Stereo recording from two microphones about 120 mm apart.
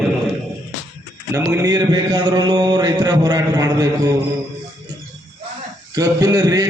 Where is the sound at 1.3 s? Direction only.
20° right (ahead or behind).